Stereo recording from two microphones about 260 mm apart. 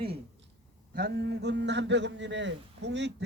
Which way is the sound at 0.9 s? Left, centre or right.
Right.